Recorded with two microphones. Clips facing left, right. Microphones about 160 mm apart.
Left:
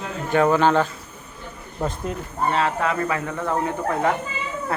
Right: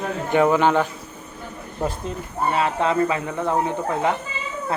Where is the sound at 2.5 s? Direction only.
10° right (ahead or behind).